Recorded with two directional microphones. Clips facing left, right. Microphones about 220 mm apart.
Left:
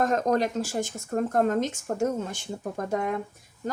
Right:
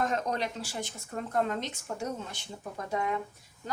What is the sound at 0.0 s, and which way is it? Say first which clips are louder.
Speech: left 7 dB; 45° left (ahead or behind).